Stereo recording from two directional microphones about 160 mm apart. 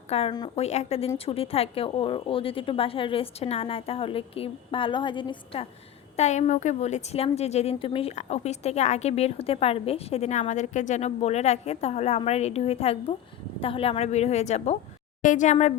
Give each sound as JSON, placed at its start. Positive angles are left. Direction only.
{"t": 0.1, "sound": "a woman's voice", "side_deg": 40}
{"t": 6.1, "sound": "a woman's voice", "side_deg": 45}